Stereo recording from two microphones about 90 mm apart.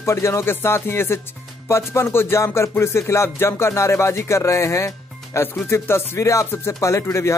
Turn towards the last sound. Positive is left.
turn(degrees=30)  # may be behind; listen again after turning